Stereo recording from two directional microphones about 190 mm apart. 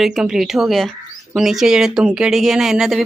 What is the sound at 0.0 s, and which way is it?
Speech, 5° right (ahead or behind).